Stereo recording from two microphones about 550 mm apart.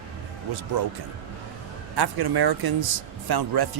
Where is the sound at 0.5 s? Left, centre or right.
Right.